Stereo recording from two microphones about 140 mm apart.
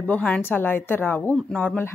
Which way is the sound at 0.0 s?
10° left (ahead or behind).